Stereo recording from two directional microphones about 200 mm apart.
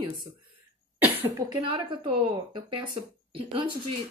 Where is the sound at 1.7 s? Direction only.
25° right (ahead or behind).